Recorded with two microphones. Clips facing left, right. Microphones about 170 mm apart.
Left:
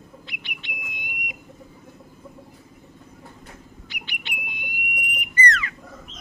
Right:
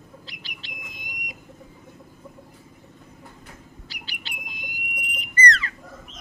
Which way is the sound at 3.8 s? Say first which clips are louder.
Left 4 dB; 35° right (ahead or behind).